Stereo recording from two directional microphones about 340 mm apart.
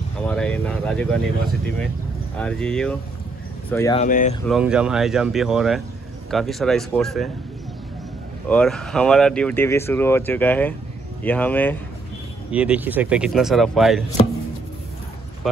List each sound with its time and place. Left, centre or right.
0.2 s speech: centre
2.3 s speech: centre
4.0 s speech: left
4.5 s speech: centre
8.5 s speech: centre
15.4 s a sound: centre